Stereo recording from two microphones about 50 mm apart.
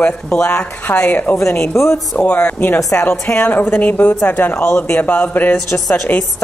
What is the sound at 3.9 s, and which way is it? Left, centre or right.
A woman's voice, left.